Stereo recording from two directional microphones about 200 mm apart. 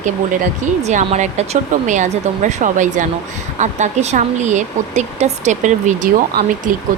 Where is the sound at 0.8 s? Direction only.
35° right (ahead or behind).